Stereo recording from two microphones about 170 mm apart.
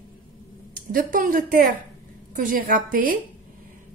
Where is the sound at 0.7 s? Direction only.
55° right (ahead or behind).